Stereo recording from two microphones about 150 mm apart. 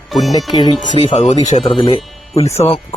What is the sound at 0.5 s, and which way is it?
Speech, 25° left (ahead or behind).